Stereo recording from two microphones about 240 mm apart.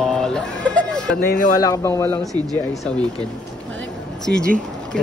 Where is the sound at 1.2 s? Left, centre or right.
Left.